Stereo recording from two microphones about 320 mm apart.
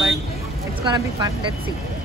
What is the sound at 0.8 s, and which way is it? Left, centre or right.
Speech, centre.